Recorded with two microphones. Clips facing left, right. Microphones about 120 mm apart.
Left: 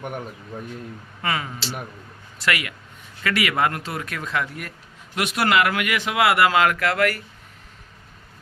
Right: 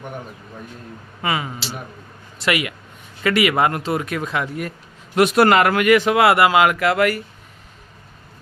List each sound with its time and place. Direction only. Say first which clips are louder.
1.2 s speech: right 3 dB; 10° right (ahead or behind)
5.1 s a man's voice: right 7 dB; 40° right (ahead or behind)
6.3 s speech: right 3 dB; 15° right (ahead or behind)